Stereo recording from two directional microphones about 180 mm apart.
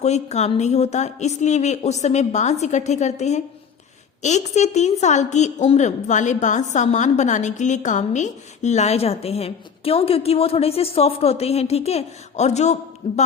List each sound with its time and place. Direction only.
0.0 s a woman's voice: 40° left (ahead or behind)